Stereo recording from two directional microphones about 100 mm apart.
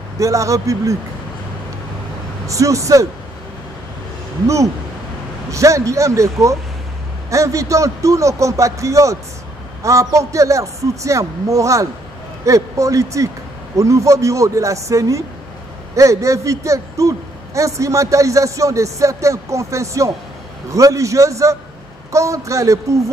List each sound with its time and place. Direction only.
0.2 s speech: 35° right (ahead or behind)
2.4 s speech: 35° right (ahead or behind)
5.5 s speech: 30° right (ahead or behind)